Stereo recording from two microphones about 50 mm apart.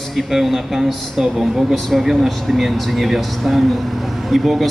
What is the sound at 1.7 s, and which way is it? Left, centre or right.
Speech, centre.